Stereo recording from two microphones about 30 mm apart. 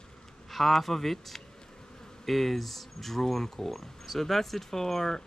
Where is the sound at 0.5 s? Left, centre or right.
Centre.